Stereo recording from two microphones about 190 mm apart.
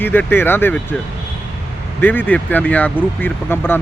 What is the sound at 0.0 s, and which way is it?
Speech, 10° left (ahead or behind).